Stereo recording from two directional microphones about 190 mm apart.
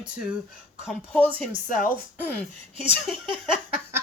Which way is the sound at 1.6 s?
45° left (ahead or behind).